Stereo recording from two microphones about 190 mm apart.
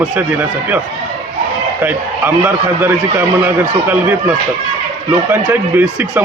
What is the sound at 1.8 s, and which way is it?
Speech, 10° right (ahead or behind).